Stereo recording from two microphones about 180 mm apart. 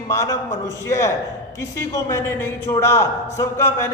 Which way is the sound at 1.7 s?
15° left (ahead or behind).